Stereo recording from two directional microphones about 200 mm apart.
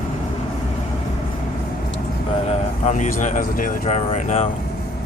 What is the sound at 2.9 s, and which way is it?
Speech, 40° left (ahead or behind).